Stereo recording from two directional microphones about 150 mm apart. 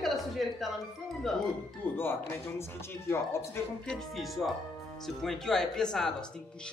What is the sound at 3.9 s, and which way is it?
Speech, centre (ahead or behind).